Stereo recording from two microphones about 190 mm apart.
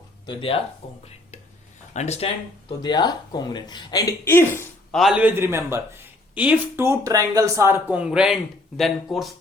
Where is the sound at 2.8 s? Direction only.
20° left (ahead or behind).